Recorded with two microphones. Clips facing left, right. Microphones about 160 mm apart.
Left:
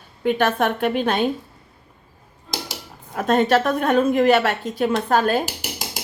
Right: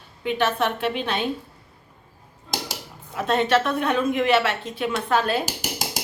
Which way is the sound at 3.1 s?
45° left (ahead or behind).